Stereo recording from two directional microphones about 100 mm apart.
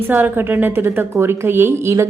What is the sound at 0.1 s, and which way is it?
A woman's voice, 20° right (ahead or behind).